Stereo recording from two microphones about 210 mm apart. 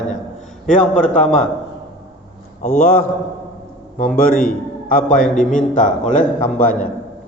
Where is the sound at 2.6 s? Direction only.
45° left (ahead or behind).